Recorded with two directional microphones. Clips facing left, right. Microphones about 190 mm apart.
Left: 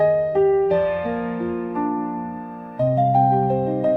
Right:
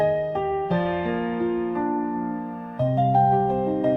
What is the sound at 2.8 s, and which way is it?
Music, 10° left (ahead or behind).